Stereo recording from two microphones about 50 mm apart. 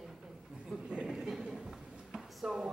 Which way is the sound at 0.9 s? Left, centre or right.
Right.